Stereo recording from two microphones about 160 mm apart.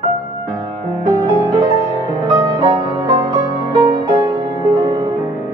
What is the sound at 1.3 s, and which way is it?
Music, 20° right (ahead or behind).